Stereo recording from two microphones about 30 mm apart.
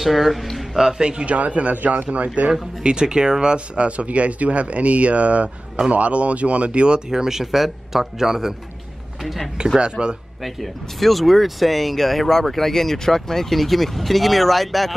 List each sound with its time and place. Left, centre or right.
0.0 s speech: centre
0.7 s speech: centre
1.2 s speech: right
1.7 s speech: right
2.8 s speech: right
3.7 s speech: right
7.1 s speech: centre
9.8 s speech: right
10.4 s speech: centre